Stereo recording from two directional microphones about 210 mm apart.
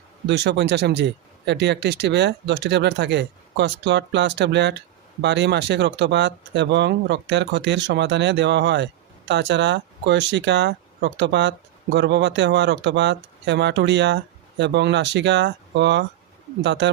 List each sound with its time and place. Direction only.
0.3 s speech: 55° right (ahead or behind)